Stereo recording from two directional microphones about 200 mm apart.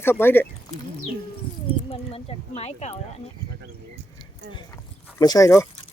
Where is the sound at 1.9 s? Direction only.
30° left (ahead or behind).